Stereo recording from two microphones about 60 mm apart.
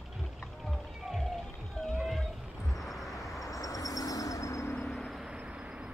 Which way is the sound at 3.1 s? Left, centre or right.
Left.